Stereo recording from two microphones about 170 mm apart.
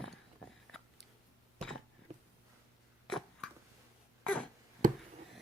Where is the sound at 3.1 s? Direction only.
Centre (ahead or behind).